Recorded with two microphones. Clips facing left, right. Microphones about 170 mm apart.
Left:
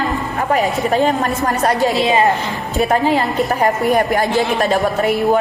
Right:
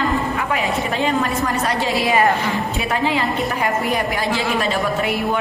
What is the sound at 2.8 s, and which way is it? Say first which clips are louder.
A woman's voice: left 8 dB; 40° left (ahead or behind).